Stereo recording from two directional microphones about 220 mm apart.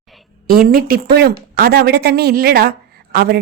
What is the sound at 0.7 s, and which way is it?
A woman's voice, 40° right (ahead or behind).